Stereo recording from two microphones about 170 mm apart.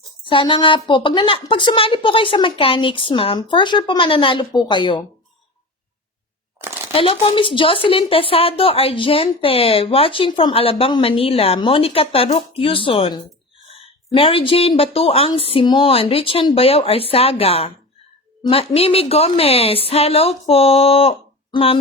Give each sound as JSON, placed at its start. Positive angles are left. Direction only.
{"t": 0.3, "sound": "a woman's voice", "side_deg": 30}
{"t": 6.6, "sound": "shuffling cards", "side_deg": -15}
{"t": 6.9, "sound": "speech", "side_deg": 30}
{"t": 13.7, "sound": "a sound", "side_deg": 35}
{"t": 14.8, "sound": "speech", "side_deg": 35}